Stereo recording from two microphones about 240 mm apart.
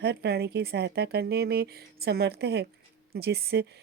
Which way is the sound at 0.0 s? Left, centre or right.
Right.